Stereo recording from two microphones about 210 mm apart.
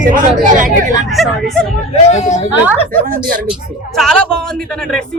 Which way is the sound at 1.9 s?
35° left (ahead or behind).